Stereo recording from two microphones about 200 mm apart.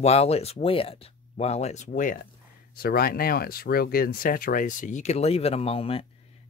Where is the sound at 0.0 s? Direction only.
30° left (ahead or behind).